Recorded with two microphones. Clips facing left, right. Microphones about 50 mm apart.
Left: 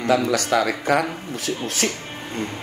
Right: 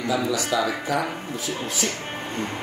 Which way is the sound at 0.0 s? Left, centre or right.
Left.